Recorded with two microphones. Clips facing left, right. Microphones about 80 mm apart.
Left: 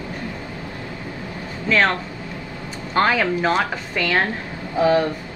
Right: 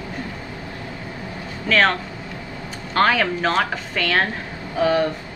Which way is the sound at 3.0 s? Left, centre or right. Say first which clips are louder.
Even; centre.